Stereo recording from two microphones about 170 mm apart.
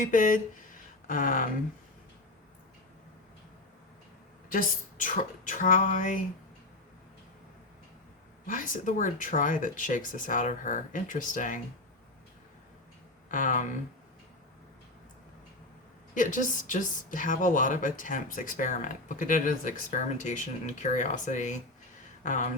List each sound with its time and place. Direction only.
0.0 s speech: 50° left (ahead or behind)
4.4 s a woman's voice: 55° left (ahead or behind)
8.4 s a woman's voice: 50° left (ahead or behind)
13.2 s speech: 50° left (ahead or behind)
16.1 s a woman's voice: 50° left (ahead or behind)